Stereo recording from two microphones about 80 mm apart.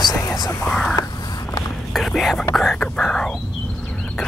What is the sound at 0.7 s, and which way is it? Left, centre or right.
Speech, centre.